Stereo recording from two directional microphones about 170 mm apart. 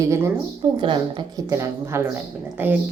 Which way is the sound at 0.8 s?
30° right (ahead or behind).